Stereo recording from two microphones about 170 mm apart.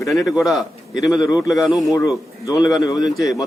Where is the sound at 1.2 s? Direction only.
25° left (ahead or behind).